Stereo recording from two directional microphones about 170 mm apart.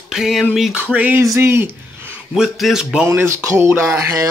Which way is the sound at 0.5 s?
5° right (ahead or behind).